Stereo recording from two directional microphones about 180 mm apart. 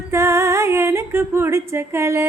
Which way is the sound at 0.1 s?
15° right (ahead or behind).